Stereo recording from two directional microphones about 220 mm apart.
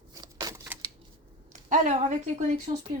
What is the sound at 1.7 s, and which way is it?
Speech, 35° right (ahead or behind).